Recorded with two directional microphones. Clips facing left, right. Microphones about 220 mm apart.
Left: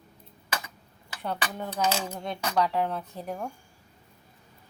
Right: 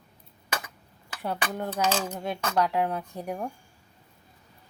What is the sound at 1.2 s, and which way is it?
Speech, 5° right (ahead or behind).